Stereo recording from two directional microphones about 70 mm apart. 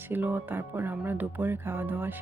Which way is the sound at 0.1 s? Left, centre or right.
Right.